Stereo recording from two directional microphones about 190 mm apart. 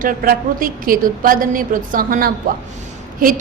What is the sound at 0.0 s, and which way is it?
A woman's voice, 50° right (ahead or behind).